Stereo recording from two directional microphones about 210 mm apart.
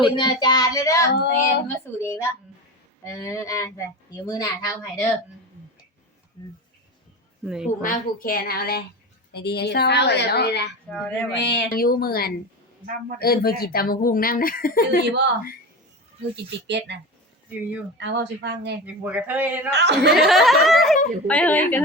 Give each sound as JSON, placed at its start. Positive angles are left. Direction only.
{"t": 0.0, "sound": "speech", "side_deg": 20}
{"t": 1.1, "sound": "speech", "side_deg": 50}
{"t": 1.6, "sound": "speech", "side_deg": 10}
{"t": 7.4, "sound": "speech", "side_deg": -5}
{"t": 7.8, "sound": "speech", "side_deg": 40}
{"t": 10.9, "sound": "speech", "side_deg": 5}
{"t": 11.3, "sound": "speech", "side_deg": 55}
{"t": 16.3, "sound": "speech", "side_deg": -55}
{"t": 17.5, "sound": "speech", "side_deg": -5}
{"t": 17.9, "sound": "speech", "side_deg": -55}
{"t": 18.9, "sound": "speech", "side_deg": -5}
{"t": 19.7, "sound": "speech", "side_deg": -55}
{"t": 20.2, "sound": "speech", "side_deg": 0}